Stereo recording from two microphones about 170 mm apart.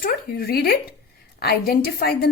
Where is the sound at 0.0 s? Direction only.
60° left (ahead or behind).